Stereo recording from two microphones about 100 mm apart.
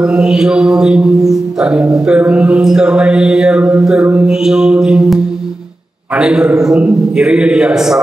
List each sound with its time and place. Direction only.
0.0 s speech: 5° right (ahead or behind)